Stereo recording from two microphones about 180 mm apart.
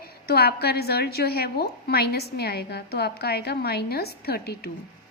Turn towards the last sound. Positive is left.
turn(degrees=60)  # may be behind; listen again after turning